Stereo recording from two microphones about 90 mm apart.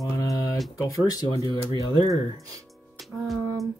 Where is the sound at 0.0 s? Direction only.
40° left (ahead or behind).